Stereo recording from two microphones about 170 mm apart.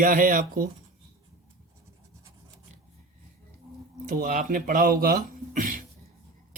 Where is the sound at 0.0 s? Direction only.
55° right (ahead or behind).